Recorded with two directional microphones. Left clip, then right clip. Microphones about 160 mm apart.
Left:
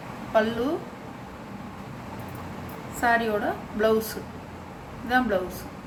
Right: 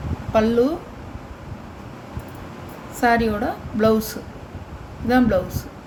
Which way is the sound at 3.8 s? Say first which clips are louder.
Right 4 dB; 55° right (ahead or behind).